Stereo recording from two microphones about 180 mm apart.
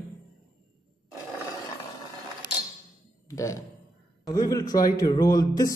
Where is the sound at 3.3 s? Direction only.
15° left (ahead or behind).